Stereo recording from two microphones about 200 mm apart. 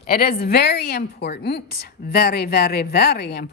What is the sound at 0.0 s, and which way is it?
A woman's voice, 45° left (ahead or behind).